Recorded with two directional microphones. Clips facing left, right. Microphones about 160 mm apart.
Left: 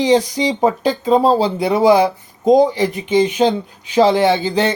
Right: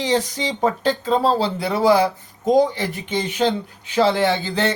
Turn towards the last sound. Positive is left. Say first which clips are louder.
# left 5 dB
turn(degrees=15)  # may be behind; listen again after turning